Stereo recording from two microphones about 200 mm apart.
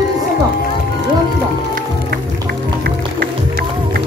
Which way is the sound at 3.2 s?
55° right (ahead or behind).